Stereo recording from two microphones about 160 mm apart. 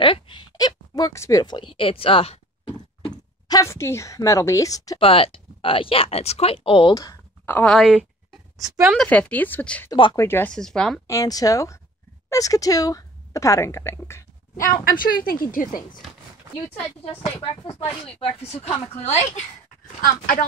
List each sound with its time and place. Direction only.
0.0 s speech: 30° left (ahead or behind)
3.4 s a woman's voice: 20° left (ahead or behind)
4.9 s speech: 35° left (ahead or behind)
7.0 s speech: 15° left (ahead or behind); by 8.1 s centre (ahead or behind)
8.6 s a woman's voice: 15° right (ahead or behind)
8.9 s speech: 5° left (ahead or behind)
9.8 s speech: 30° left (ahead or behind)
10.1 s speech: 15° left (ahead or behind)
11.1 s a woman's voice: 20° left (ahead or behind)
14.9 s speech: 65° left (ahead or behind)
17.0 s speech: 35° left (ahead or behind)
20.0 s speech: 65° left (ahead or behind)